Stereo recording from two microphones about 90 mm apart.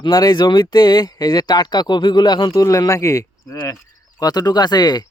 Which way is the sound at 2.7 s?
40° left (ahead or behind).